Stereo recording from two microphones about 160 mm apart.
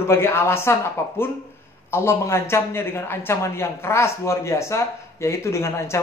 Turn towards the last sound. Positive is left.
turn(degrees=15)  # may be behind; listen again after turning